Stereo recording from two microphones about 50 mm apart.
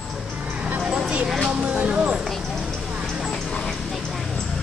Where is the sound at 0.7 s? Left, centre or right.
Centre.